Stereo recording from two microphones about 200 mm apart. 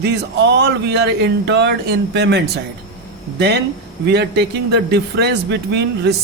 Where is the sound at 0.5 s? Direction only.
55° right (ahead or behind).